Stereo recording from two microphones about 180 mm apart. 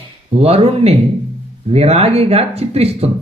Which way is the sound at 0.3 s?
35° right (ahead or behind).